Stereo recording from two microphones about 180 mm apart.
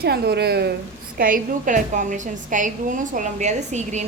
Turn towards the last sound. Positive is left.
turn(degrees=-40)  # may be behind; listen again after turning